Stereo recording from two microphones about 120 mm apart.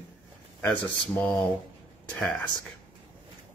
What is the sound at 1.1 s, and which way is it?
Speech, 10° left (ahead or behind).